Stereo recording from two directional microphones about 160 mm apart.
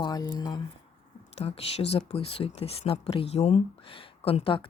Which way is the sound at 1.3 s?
40° left (ahead or behind).